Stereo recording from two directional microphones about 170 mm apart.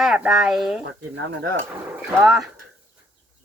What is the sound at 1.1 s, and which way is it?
Speech, 90° right.